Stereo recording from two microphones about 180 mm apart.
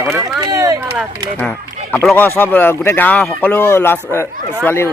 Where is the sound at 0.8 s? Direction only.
5° right (ahead or behind).